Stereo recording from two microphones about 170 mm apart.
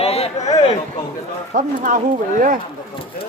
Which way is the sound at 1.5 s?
50° right (ahead or behind).